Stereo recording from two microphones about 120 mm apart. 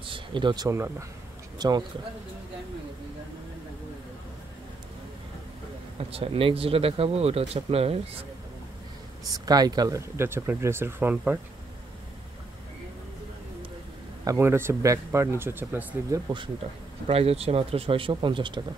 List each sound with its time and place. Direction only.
0.0 s a sound: 45° right (ahead or behind)
0.7 s speech: 20° right (ahead or behind)
1.6 s speech: 35° right (ahead or behind)
5.9 s speech: 55° right (ahead or behind)
9.2 s speech: 30° right (ahead or behind); by 11.3 s 15° right (ahead or behind)
14.2 s speech: 20° right (ahead or behind)
17.1 s speech: 55° right (ahead or behind)